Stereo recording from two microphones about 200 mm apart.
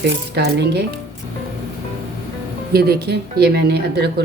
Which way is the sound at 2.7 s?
50° right (ahead or behind).